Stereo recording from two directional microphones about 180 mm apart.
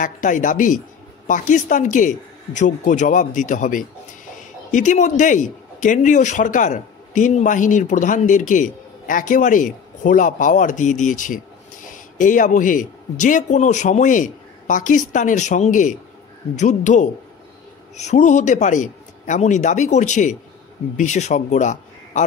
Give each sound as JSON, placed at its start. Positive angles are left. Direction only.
{"t": 0.0, "sound": "a man's voice", "side_deg": 45}